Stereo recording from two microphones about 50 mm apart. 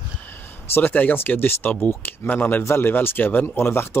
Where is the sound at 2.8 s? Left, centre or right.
Left.